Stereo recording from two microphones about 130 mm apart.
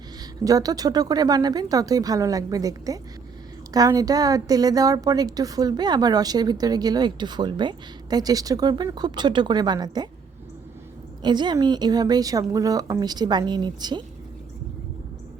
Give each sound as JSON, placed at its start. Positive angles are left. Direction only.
{"t": 0.4, "sound": "a woman's voice", "side_deg": -30}
{"t": 11.2, "sound": "a woman's voice", "side_deg": -35}